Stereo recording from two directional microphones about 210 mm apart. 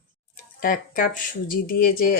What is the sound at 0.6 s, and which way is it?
Speech, 40° left (ahead or behind).